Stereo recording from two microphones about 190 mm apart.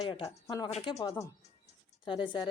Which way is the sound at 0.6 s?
30° left (ahead or behind).